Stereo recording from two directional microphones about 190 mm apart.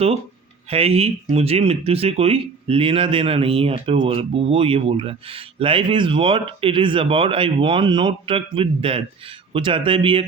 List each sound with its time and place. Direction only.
0.7 s speech: 35° right (ahead or behind)